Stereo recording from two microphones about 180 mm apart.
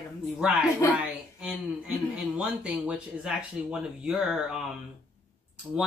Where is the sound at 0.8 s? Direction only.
10° right (ahead or behind).